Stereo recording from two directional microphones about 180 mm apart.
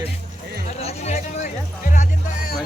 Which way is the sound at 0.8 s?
35° left (ahead or behind).